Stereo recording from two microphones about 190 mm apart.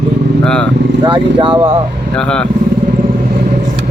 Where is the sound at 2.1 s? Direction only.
5° left (ahead or behind).